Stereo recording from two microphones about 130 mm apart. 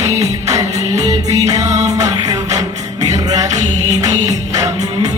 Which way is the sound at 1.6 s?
60° right (ahead or behind).